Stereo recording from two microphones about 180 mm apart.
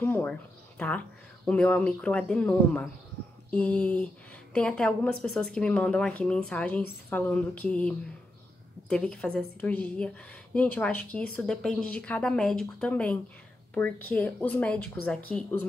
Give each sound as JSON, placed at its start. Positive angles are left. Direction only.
{"t": 0.0, "sound": "speech", "side_deg": 10}